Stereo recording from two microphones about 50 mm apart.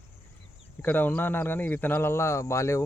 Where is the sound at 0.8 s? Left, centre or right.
Left.